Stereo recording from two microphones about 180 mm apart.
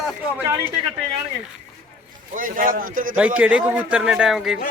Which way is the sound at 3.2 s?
10° right (ahead or behind).